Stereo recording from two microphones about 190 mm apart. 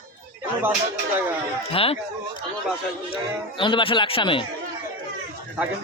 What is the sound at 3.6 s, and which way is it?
Speech, 25° left (ahead or behind).